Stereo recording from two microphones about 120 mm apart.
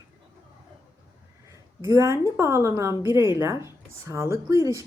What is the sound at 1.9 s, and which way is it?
A woman's voice, 25° right (ahead or behind).